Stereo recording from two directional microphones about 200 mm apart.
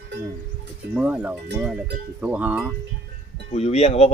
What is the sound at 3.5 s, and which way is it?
Speech, 30° left (ahead or behind).